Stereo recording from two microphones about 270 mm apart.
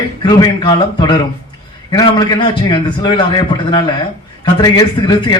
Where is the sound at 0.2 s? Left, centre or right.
Centre.